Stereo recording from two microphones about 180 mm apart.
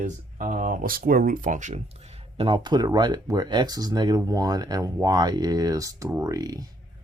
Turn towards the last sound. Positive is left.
turn(degrees=-20)  # may be behind; listen again after turning